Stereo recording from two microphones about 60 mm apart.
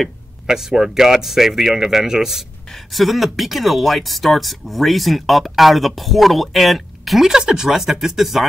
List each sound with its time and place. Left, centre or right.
0.5 s speech: centre